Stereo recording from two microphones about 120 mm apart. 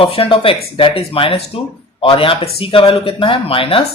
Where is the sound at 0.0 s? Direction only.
50° left (ahead or behind).